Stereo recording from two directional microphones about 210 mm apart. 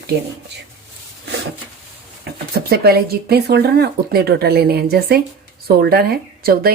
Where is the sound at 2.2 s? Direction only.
50° right (ahead or behind).